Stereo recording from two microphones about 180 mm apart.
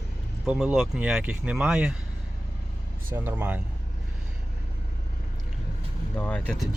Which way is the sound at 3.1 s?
10° right (ahead or behind).